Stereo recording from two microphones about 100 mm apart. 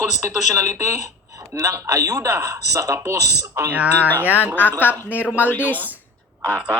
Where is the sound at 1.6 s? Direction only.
30° right (ahead or behind).